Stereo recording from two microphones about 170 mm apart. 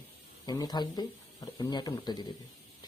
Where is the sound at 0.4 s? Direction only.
25° left (ahead or behind).